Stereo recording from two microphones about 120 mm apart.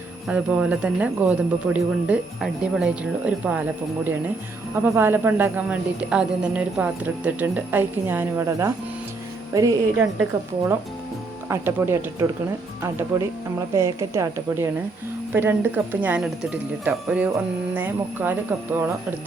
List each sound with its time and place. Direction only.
0.3 s a woman's voice: 10° right (ahead or behind); by 10.1 s 30° right (ahead or behind)
10.3 s speech: 40° right (ahead or behind)
11.4 s a woman's voice: 20° right (ahead or behind)